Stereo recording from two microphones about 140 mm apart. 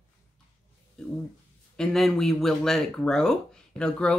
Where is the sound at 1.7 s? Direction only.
5° left (ahead or behind).